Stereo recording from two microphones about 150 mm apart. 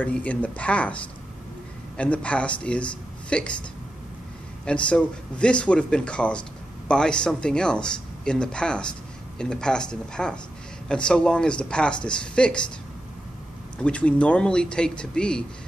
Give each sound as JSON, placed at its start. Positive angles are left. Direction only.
{"t": 0.0, "sound": "speech", "side_deg": 10}
{"t": 2.0, "sound": "speech", "side_deg": 10}
{"t": 4.6, "sound": "speech", "side_deg": 5}
{"t": 13.7, "sound": "speech", "side_deg": 10}